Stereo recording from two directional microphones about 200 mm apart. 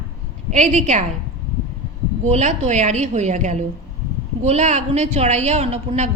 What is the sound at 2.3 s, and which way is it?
A woman's voice, 35° right (ahead or behind).